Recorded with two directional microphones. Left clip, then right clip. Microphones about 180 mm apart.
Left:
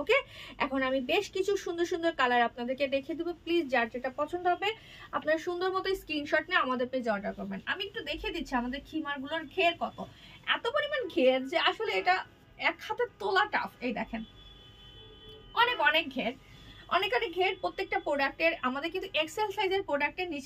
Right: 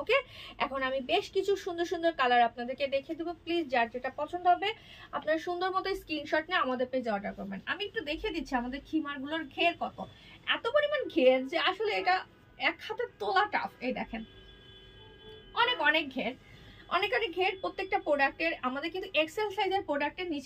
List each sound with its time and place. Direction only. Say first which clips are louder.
0.0 s a woman's voice: left 1 dB; 20° left (ahead or behind)
15.5 s a woman's voice: left 1 dB; 20° left (ahead or behind)